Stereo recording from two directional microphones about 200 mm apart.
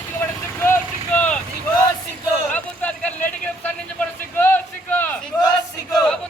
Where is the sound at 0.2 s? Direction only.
10° left (ahead or behind).